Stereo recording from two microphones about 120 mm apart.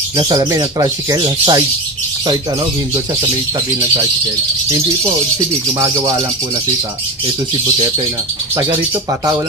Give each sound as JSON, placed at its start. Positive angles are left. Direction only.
{"t": 0.2, "sound": "speech", "side_deg": -40}